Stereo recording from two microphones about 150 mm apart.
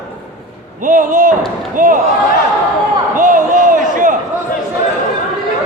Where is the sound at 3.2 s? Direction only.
60° right (ahead or behind).